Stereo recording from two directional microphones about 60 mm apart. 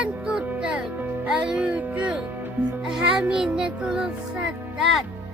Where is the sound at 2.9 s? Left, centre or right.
Centre.